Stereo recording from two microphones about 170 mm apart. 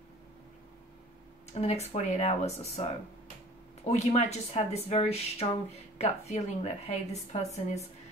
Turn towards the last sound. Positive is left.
turn(degrees=40)  # may be behind; listen again after turning